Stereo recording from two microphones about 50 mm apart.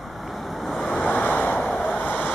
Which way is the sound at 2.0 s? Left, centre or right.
Left.